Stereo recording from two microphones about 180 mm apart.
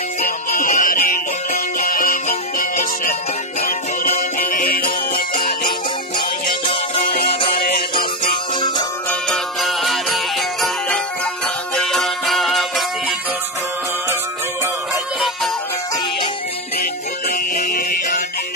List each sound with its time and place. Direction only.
0.2 s music: 50° left (ahead or behind)
6.6 s music: 30° left (ahead or behind)
7.1 s music: 60° left (ahead or behind)
8.2 s music: 25° left (ahead or behind)
9.3 s music: centre (ahead or behind)
11.7 s music: centre (ahead or behind)
15.1 s music: centre (ahead or behind)
17.3 s music: 50° left (ahead or behind)